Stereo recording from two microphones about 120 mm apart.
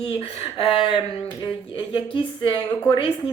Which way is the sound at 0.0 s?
50° left (ahead or behind).